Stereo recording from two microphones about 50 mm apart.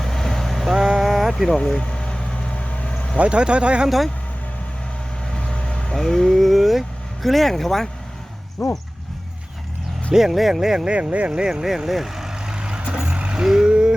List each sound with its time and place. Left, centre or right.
0.0 s vehicle: centre
0.7 s a sound: centre
1.5 s boat: centre
2.9 s vehicle: centre
3.2 s speech: right
3.8 s speech: centre
5.3 s vehicle: centre
6.0 s speech: centre
10.1 s speech: centre
10.9 s speech: right
11.3 s vehicle: centre